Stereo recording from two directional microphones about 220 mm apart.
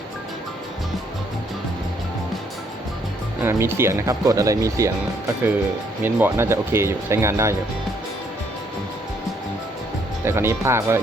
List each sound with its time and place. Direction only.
3.4 s speech: 10° right (ahead or behind)
6.0 s speech: 10° right (ahead or behind)
10.2 s speech: 10° right (ahead or behind)